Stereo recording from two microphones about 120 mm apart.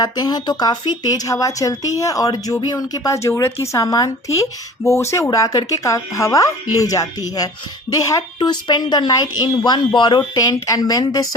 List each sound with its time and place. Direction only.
0.0 s a woman's voice: 35° left (ahead or behind)